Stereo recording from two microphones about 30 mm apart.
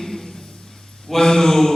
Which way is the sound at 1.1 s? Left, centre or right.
Centre.